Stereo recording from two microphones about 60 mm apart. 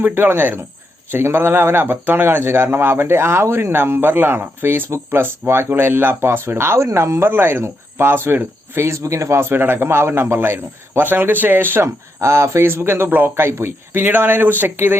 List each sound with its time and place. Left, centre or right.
0.0 s speech: right
6.8 s speech: right
7.3 s speech: right
9.0 s a man's voice: right
9.5 s speech: right
11.9 s speech: right